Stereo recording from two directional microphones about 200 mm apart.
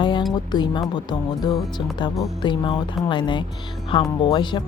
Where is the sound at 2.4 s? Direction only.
20° left (ahead or behind).